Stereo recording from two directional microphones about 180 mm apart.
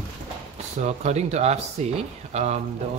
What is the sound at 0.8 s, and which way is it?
Speech, 40° right (ahead or behind).